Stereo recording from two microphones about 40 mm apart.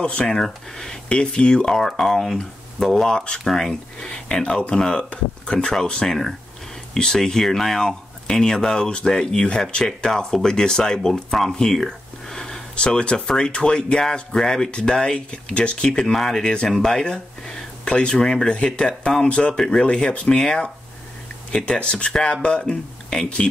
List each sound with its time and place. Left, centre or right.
0.2 s speech: centre
1.0 s speech: left
1.8 s speech: centre
11.3 s a sound: centre
12.7 s speech: left
16.2 s speech: centre